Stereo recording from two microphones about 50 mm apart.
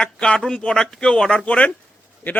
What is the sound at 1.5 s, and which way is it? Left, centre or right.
Speech, left.